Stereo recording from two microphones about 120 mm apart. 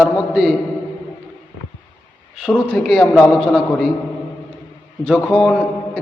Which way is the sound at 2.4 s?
5° left (ahead or behind).